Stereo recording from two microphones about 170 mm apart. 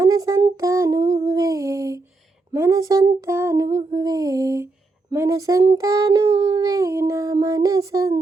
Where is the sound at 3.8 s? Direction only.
35° right (ahead or behind).